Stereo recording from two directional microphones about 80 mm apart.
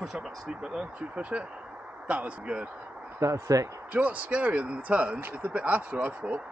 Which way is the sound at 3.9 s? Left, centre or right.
Centre.